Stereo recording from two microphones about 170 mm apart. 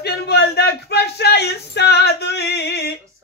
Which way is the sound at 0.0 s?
75° left (ahead or behind).